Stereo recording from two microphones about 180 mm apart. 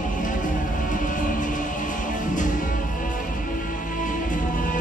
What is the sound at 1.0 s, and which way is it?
Music, 45° left (ahead or behind).